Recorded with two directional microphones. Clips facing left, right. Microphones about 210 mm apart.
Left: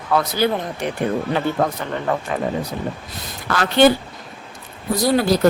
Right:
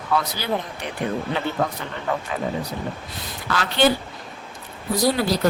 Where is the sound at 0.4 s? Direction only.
50° left (ahead or behind).